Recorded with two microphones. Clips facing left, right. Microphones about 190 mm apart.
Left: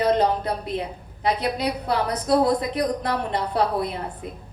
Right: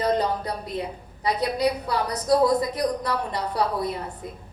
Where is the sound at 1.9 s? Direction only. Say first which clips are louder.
Left 1 dB; 65° left (ahead or behind).